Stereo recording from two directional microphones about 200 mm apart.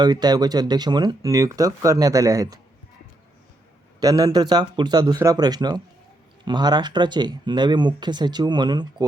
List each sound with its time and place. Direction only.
0.0 s speech: 20° right (ahead or behind)
4.0 s speech: 20° right (ahead or behind)